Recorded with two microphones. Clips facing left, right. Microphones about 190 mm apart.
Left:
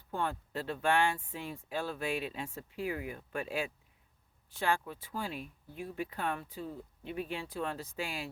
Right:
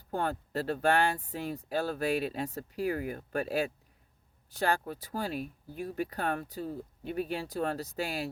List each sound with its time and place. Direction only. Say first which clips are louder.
0.1 s speech: right 3 dB; 40° right (ahead or behind)